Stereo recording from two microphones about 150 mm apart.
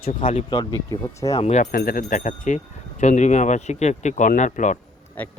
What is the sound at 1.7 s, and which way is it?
Speech, 75° left (ahead or behind).